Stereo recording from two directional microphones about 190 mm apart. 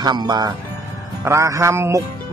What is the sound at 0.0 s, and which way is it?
Speech, 20° right (ahead or behind).